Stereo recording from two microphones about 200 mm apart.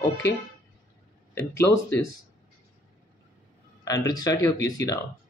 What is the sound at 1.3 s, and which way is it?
Speech, 15° left (ahead or behind).